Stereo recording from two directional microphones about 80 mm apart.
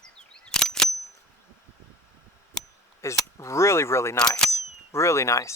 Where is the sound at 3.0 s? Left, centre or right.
Left.